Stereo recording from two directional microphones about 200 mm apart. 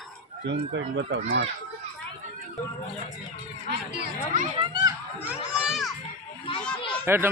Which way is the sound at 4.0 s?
40° right (ahead or behind).